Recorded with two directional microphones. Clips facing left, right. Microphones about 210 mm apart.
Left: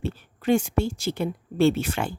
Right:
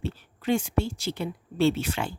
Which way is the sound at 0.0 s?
50° left (ahead or behind).